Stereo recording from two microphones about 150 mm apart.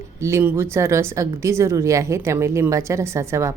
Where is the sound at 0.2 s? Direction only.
20° right (ahead or behind).